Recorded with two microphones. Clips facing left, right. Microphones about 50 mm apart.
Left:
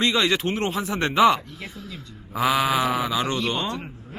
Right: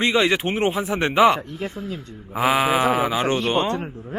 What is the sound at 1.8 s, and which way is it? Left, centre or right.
Speech, right.